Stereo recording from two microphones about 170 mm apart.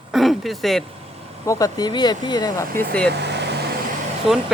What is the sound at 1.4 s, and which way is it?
Speech, 20° left (ahead or behind).